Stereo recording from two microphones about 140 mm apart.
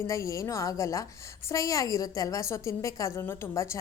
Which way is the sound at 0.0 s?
20° left (ahead or behind).